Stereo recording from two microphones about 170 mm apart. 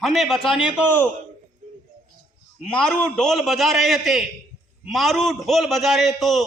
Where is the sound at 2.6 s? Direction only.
5° left (ahead or behind).